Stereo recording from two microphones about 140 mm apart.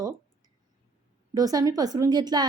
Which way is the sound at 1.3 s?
25° right (ahead or behind).